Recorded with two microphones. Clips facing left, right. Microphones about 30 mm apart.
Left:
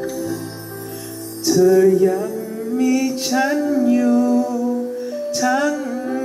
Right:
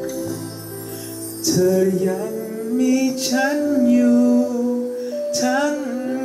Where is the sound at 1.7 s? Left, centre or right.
Centre.